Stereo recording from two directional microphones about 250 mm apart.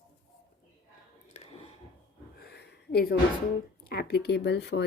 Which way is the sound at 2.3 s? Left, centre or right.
Left.